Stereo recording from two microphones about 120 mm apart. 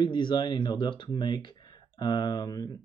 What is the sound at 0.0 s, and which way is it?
Speech, 40° left (ahead or behind).